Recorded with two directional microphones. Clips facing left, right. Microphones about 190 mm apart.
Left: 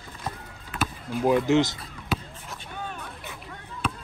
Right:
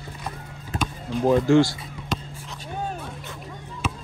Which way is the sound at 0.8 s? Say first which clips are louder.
Right 2 dB; 10° left (ahead or behind).